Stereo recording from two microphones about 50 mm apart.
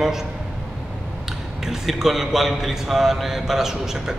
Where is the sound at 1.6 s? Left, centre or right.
Centre.